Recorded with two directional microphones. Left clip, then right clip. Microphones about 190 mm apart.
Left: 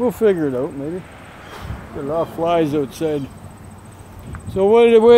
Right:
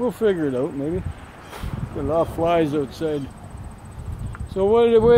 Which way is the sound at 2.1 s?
20° right (ahead or behind).